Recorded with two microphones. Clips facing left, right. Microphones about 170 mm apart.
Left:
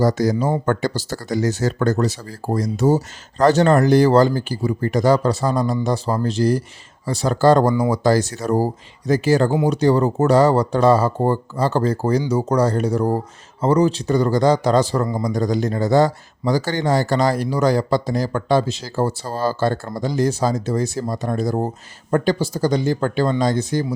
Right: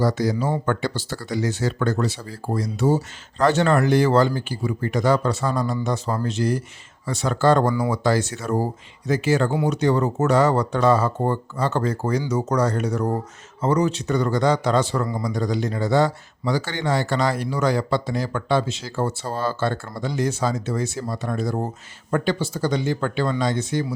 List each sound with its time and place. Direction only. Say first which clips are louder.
0.0 s speech: left 4 dB; 45° left (ahead or behind)